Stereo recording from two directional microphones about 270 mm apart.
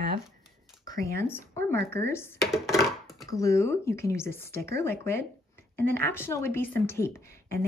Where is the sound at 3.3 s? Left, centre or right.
Centre.